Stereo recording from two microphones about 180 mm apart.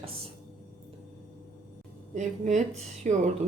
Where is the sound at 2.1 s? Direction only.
40° right (ahead or behind).